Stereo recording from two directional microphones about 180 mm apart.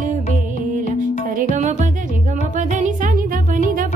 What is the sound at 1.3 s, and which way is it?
Music, 50° right (ahead or behind).